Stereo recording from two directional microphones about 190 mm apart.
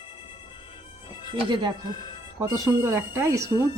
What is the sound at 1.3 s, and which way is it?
Speech, 25° right (ahead or behind).